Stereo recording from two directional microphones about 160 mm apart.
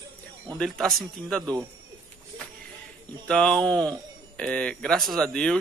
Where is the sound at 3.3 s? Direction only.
5° left (ahead or behind).